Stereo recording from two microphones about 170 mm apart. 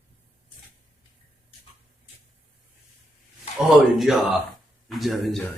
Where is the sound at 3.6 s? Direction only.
Centre (ahead or behind).